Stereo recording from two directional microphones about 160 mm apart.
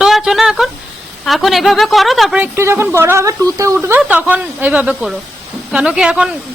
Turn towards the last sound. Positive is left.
turn(degrees=-5)  # may be behind; listen again after turning